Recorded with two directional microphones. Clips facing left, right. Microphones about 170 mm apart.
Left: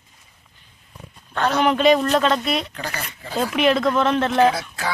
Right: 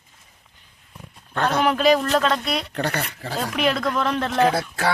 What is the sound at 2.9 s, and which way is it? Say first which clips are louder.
Speech: left 1 dB; 75° right (ahead or behind).